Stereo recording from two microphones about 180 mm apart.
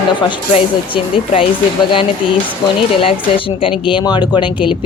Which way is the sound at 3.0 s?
30° left (ahead or behind).